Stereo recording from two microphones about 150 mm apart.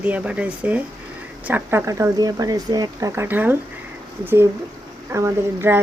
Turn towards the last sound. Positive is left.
turn(degrees=-15)  # may be behind; listen again after turning